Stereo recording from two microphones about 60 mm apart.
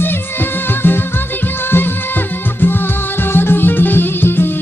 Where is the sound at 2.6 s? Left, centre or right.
Left.